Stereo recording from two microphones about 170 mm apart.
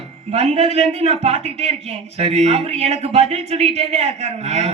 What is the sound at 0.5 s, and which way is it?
A man's voice, 40° right (ahead or behind).